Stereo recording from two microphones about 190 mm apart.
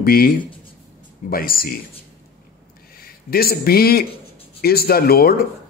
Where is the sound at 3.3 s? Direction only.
55° left (ahead or behind).